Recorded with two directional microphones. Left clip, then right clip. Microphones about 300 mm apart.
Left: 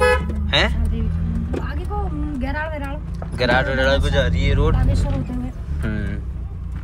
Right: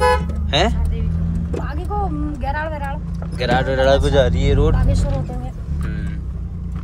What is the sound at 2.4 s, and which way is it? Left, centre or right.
Vehicle, right.